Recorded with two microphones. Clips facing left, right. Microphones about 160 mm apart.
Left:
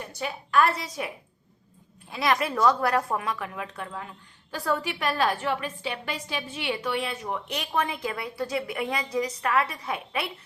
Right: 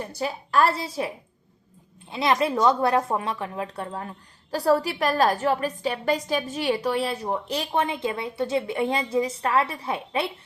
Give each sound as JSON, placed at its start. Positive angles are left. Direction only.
{"t": 0.0, "sound": "a woman's voice", "side_deg": -35}